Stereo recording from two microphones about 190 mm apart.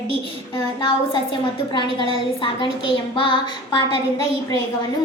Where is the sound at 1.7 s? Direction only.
25° left (ahead or behind).